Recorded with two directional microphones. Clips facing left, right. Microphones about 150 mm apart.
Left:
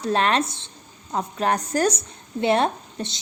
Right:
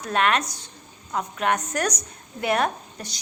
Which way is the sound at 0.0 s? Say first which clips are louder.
Left 2 dB; 30° left (ahead or behind).